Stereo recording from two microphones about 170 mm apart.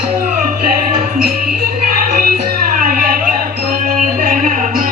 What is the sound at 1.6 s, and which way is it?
Music, 60° right (ahead or behind).